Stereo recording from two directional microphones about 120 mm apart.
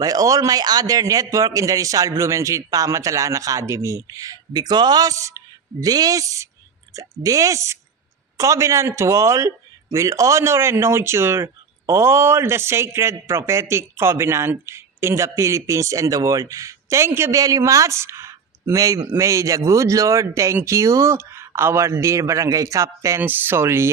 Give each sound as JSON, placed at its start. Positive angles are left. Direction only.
{"t": 0.0, "sound": "speech", "side_deg": -30}